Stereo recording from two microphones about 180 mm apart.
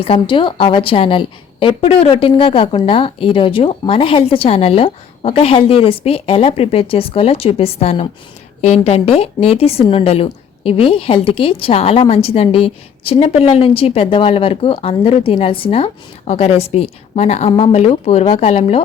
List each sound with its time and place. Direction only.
0.0 s a woman's voice: 30° left (ahead or behind)